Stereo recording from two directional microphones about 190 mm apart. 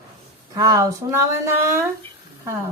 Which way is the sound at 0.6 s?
20° right (ahead or behind).